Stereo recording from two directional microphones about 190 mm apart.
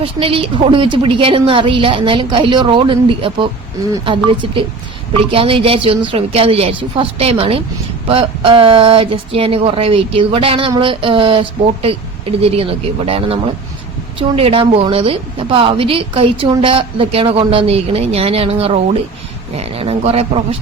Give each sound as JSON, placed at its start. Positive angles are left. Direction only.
{"t": 0.0, "sound": "a woman's voice", "side_deg": -30}
{"t": 5.3, "sound": "a woman's voice", "side_deg": -30}